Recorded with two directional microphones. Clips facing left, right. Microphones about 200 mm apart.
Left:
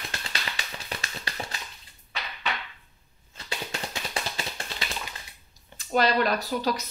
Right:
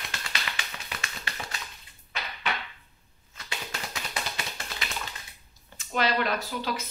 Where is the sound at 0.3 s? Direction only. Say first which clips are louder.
Left 1 dB; 35° left (ahead or behind).